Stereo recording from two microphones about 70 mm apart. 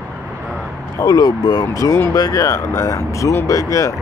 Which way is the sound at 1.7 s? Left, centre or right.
Left.